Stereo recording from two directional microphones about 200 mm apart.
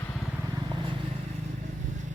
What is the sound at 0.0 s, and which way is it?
Vehicle, centre (ahead or behind).